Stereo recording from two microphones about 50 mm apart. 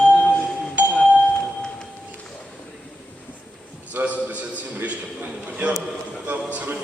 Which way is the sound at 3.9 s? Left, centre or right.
Right.